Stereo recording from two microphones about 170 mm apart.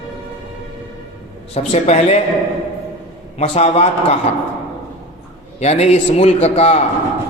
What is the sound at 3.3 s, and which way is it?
Speech, 40° left (ahead or behind).